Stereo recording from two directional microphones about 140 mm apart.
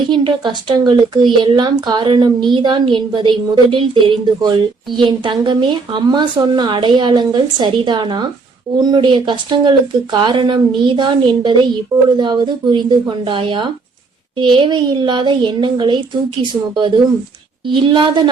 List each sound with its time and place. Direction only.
0.1 s a woman's voice: 35° right (ahead or behind)